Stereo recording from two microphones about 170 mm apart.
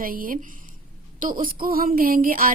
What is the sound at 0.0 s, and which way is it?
Speech, 55° right (ahead or behind).